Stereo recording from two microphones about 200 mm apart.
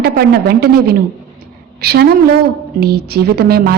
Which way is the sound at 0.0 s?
50° right (ahead or behind).